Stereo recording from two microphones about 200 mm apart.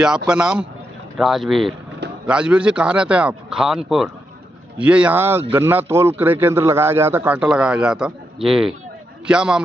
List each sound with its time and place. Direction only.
0.3 s a man's voice: 5° right (ahead or behind)